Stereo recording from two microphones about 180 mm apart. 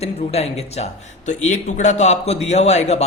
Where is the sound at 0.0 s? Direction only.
35° left (ahead or behind).